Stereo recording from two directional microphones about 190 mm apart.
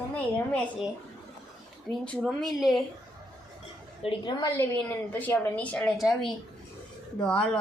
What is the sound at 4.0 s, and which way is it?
Speech, 25° left (ahead or behind).